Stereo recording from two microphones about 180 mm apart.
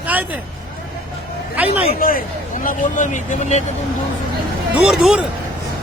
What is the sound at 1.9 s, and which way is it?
Speech, 55° left (ahead or behind).